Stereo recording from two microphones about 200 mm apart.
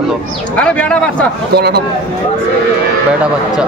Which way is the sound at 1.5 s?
55° right (ahead or behind).